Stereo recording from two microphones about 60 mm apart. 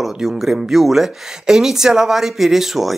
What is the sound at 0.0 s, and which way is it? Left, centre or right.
Speech, centre.